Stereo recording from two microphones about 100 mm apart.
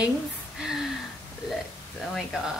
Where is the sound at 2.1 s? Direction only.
Centre (ahead or behind).